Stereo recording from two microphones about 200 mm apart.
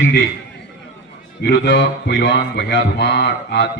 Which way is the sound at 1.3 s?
60° left (ahead or behind).